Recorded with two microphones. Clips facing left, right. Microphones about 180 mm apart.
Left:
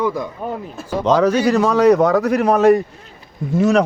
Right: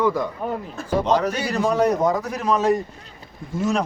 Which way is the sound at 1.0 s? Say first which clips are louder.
Left 10 dB; 90° left.